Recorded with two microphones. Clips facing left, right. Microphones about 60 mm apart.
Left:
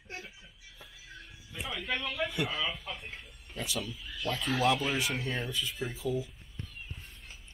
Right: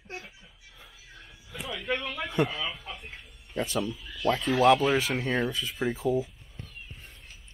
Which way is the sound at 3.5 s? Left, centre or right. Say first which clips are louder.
Right 7 dB; right.